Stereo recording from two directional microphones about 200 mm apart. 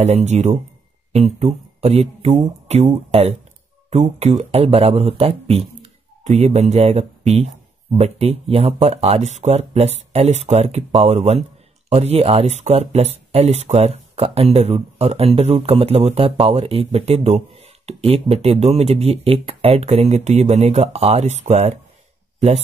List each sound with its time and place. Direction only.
0.0 s speech: 35° right (ahead or behind)